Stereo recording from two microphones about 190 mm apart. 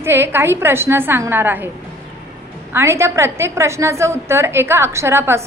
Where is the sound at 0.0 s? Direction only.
10° right (ahead or behind).